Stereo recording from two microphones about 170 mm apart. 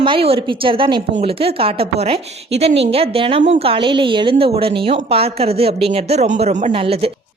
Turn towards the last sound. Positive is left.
turn(degrees=-35)  # may be behind; listen again after turning